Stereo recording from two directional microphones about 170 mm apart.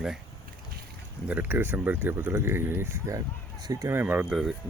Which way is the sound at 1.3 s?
10° right (ahead or behind).